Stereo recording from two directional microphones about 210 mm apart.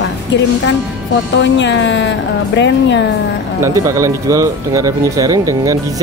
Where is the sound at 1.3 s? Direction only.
60° left (ahead or behind).